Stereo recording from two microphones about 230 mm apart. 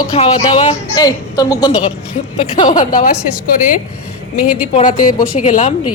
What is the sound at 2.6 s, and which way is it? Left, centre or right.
Speech, left.